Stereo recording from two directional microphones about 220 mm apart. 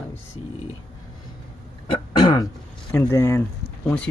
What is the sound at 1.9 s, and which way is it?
Throat clearing, 20° left (ahead or behind).